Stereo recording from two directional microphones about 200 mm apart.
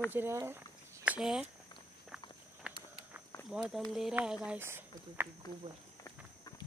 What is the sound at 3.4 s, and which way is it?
Speech, centre (ahead or behind).